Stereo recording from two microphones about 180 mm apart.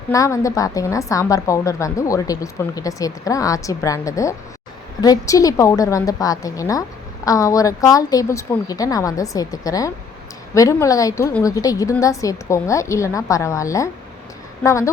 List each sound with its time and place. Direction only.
0.1 s a woman's voice: 15° left (ahead or behind)